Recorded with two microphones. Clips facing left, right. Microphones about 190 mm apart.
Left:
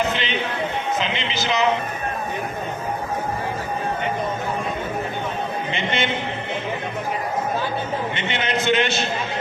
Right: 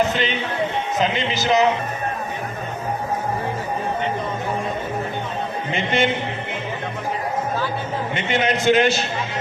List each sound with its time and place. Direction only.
0.9 s a man's voice: 45° right (ahead or behind)
5.7 s a man's voice: 45° right (ahead or behind)
8.1 s a man's voice: 40° right (ahead or behind)